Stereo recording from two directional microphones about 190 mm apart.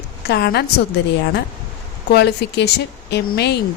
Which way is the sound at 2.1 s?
65° left (ahead or behind).